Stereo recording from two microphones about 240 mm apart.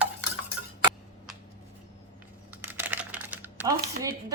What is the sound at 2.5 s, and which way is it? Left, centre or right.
Crumpling, centre.